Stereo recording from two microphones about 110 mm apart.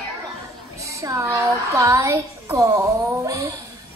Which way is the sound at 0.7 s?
30° right (ahead or behind).